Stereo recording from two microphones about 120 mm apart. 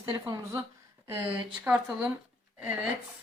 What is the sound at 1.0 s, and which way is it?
Speech, 15° right (ahead or behind).